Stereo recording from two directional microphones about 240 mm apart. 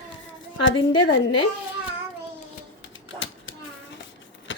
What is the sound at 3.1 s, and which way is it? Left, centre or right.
Typewriter, left.